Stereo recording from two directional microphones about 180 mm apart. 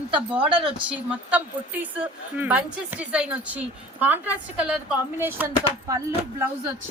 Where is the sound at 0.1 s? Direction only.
5° right (ahead or behind).